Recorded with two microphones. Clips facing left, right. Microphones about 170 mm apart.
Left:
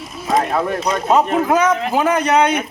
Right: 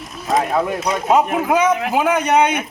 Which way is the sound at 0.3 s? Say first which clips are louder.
Even; centre (ahead or behind).